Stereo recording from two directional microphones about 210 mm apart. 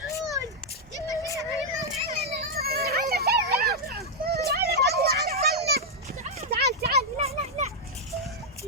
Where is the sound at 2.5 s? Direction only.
45° right (ahead or behind).